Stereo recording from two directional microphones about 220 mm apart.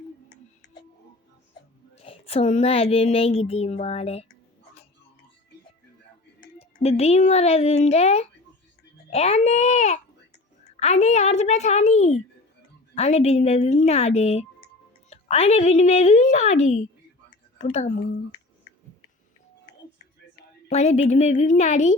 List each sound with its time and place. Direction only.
2.0 s speech: 25° left (ahead or behind)
6.6 s a woman's voice: 25° left (ahead or behind)
20.7 s a woman's voice: 30° left (ahead or behind)